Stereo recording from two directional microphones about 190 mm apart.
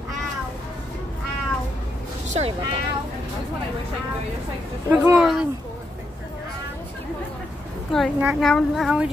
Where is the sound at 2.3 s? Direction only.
35° right (ahead or behind).